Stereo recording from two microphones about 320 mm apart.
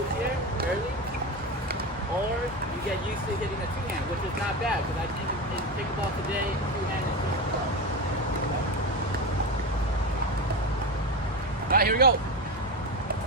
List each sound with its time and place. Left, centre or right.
11.7 s speech: right